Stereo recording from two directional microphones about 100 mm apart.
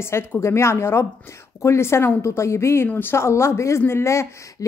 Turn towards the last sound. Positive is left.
turn(degrees=25)  # may be behind; listen again after turning